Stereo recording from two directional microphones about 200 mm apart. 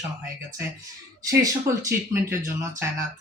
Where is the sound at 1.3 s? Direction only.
15° right (ahead or behind).